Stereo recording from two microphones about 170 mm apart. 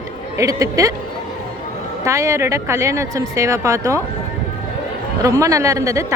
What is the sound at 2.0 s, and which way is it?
Speech, 20° right (ahead or behind).